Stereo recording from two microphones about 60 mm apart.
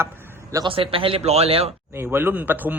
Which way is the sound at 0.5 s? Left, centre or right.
Right.